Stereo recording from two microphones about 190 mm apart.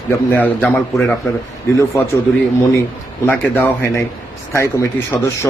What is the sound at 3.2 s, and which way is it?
Speech, 10° left (ahead or behind).